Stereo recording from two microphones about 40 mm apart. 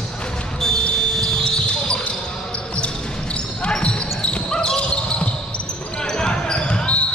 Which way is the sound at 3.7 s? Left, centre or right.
Left.